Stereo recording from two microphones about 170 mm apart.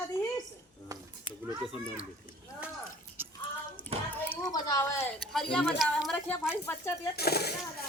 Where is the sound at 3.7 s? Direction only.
10° left (ahead or behind).